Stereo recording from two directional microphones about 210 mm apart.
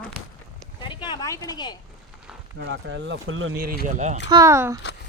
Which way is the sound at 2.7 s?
60° right (ahead or behind).